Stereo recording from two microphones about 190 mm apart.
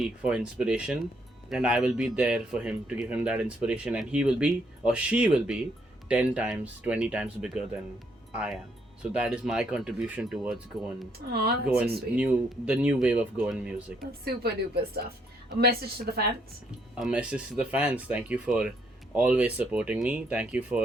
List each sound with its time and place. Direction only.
0.0 s speech: 5° right (ahead or behind)
11.2 s speech: 55° right (ahead or behind)
11.6 s speech: 5° right (ahead or behind)
14.1 s speech: 55° right (ahead or behind)
15.6 s a woman's voice: 55° right (ahead or behind)
17.0 s speech: 5° right (ahead or behind)